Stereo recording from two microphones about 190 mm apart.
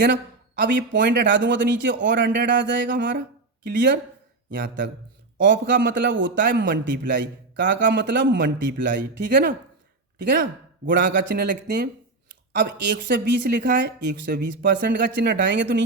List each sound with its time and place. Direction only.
0.6 s a man's voice: 70° right (ahead or behind)
5.4 s a man's voice: 70° right (ahead or behind)